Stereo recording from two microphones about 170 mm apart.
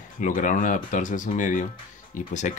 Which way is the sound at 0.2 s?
50° left (ahead or behind).